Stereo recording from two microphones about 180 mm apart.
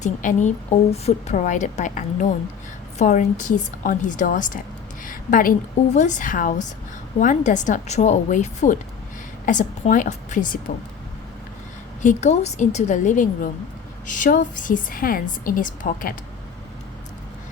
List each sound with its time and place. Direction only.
0.0 s a woman's voice: 45° left (ahead or behind)
12.0 s a woman's voice: 40° left (ahead or behind)